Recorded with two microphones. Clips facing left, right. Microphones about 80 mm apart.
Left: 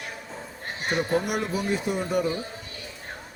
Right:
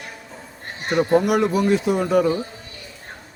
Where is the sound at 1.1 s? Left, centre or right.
Right.